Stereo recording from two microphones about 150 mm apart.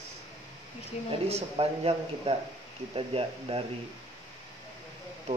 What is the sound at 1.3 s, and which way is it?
Speech, 40° right (ahead or behind).